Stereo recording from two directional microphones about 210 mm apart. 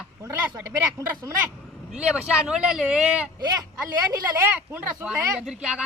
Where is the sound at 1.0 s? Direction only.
15° right (ahead or behind).